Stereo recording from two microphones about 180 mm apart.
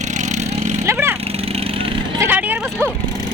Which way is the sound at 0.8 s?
15° right (ahead or behind).